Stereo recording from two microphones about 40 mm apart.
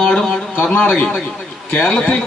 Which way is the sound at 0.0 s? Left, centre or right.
Left.